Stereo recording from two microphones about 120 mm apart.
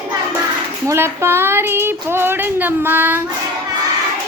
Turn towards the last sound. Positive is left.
turn(degrees=-15)  # may be behind; listen again after turning